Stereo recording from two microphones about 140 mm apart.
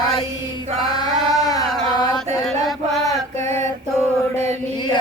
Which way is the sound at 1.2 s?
30° left (ahead or behind).